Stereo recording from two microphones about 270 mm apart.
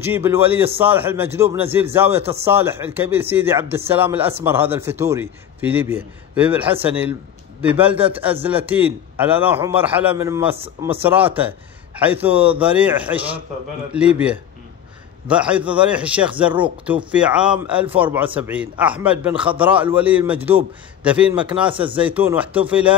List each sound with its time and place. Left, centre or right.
0.0 s a man's voice: centre
19.3 s speech: centre
19.6 s a man's voice: centre
21.6 s speech: centre
21.9 s a man's voice: centre